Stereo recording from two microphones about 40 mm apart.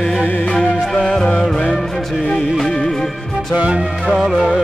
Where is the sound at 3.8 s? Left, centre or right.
Centre.